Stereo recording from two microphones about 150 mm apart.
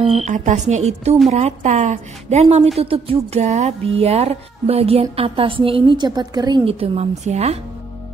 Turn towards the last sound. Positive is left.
turn(degrees=-45)  # may be behind; listen again after turning